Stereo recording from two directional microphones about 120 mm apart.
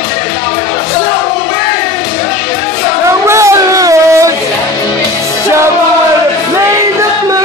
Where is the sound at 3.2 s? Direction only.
25° right (ahead or behind).